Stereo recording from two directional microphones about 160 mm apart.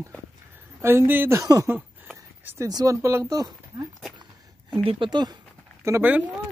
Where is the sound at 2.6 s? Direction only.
20° right (ahead or behind).